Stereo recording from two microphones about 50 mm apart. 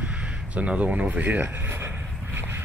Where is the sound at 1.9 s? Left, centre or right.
Right.